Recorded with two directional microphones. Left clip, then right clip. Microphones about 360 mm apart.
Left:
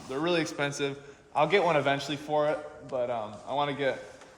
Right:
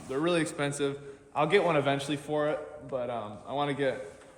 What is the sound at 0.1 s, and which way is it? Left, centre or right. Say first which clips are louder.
A man's voice: even; centre.